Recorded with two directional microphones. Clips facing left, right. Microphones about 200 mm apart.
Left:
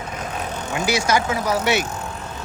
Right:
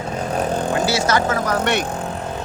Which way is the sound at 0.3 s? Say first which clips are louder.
Right 7 dB; 35° right (ahead or behind).